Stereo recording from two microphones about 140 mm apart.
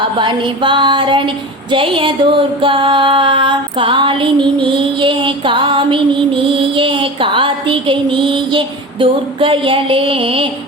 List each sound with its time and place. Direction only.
0.0 s music: 35° right (ahead or behind)